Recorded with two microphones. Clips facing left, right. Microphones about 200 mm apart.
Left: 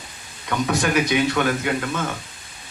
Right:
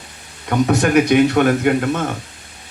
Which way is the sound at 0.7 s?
60° right (ahead or behind).